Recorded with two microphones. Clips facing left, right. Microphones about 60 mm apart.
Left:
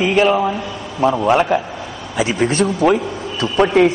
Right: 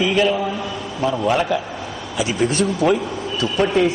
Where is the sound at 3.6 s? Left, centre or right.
Left.